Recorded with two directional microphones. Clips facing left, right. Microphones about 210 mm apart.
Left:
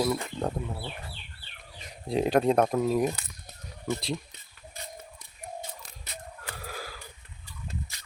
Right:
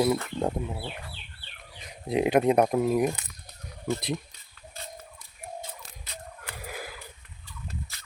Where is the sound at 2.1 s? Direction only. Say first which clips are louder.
Right 1 dB; 15° right (ahead or behind).